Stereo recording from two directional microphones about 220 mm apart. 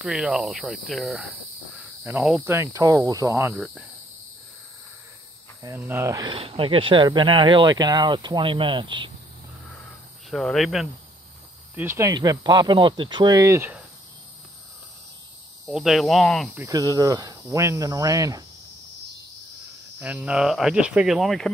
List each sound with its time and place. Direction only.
0.0 s speech: centre (ahead or behind)
5.6 s speech: 10° right (ahead or behind)
10.3 s speech: centre (ahead or behind)
11.7 s speech: 10° right (ahead or behind)
15.6 s speech: centre (ahead or behind)
16.5 s speech: 15° right (ahead or behind)
20.0 s speech: 5° right (ahead or behind)